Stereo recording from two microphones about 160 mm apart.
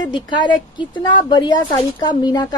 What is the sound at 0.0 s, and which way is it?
A woman's voice, 30° left (ahead or behind).